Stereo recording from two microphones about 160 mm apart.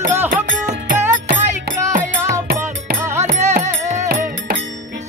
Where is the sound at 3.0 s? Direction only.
15° right (ahead or behind).